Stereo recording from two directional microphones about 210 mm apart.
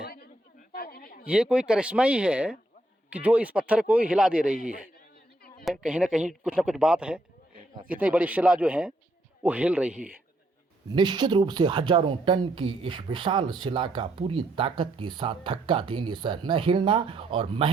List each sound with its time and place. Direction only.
0.0 s a sound: 45° left (ahead or behind)
1.2 s speech: 5° right (ahead or behind)
5.6 s speech: centre (ahead or behind)
10.8 s speech: 20° right (ahead or behind)